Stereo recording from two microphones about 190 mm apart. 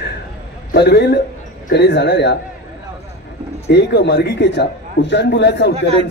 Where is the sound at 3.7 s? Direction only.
60° left (ahead or behind).